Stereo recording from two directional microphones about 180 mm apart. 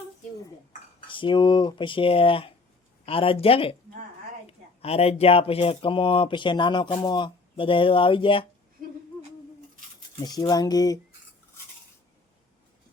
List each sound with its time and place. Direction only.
1.0 s speech: 30° left (ahead or behind)
10.2 s speech: 20° left (ahead or behind)